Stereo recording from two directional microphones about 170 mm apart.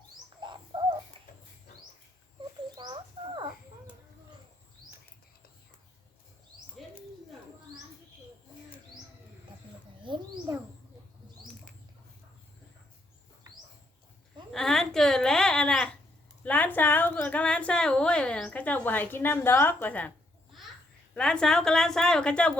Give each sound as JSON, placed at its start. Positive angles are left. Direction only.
{"t": 0.4, "sound": "bird", "side_deg": -30}
{"t": 1.2, "sound": "a sound", "side_deg": -30}
{"t": 2.7, "sound": "rodents", "side_deg": -30}
{"t": 10.1, "sound": "wild animals", "side_deg": -30}
{"t": 14.5, "sound": "a sound", "side_deg": 0}
{"t": 21.2, "sound": "a woman's voice", "side_deg": 5}